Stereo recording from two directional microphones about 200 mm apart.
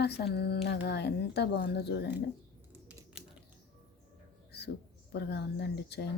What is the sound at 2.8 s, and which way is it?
Typing, 5° right (ahead or behind).